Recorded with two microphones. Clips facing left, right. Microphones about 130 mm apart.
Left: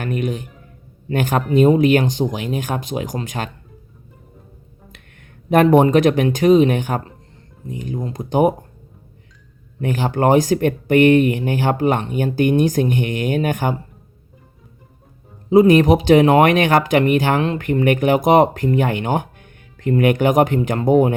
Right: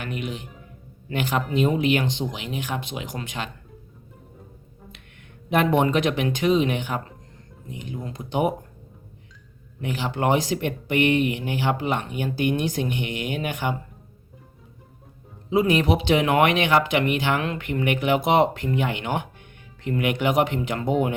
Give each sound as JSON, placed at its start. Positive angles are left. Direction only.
{"t": 0.0, "sound": "a man's voice", "side_deg": 45}
{"t": 5.5, "sound": "speech", "side_deg": 45}
{"t": 9.8, "sound": "speech", "side_deg": 45}
{"t": 15.4, "sound": "speech", "side_deg": 40}